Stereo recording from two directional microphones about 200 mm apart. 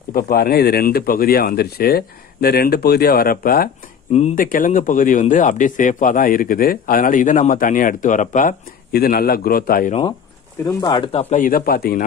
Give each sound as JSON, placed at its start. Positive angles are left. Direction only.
{"t": 0.1, "sound": "speech", "side_deg": 50}
{"t": 10.6, "sound": "speech", "side_deg": 15}